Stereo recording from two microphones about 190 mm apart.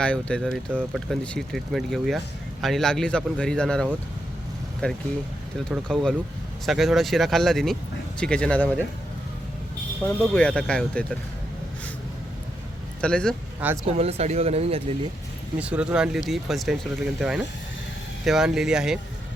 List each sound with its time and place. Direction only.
0.0 s speech: 5° left (ahead or behind)
10.0 s speech: 5° left (ahead or behind)
13.0 s speech: 5° left (ahead or behind)
13.8 s speech: 30° right (ahead or behind)
15.5 s speech: 5° right (ahead or behind)